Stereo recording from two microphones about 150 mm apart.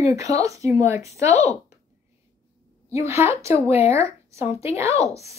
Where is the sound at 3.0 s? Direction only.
20° right (ahead or behind).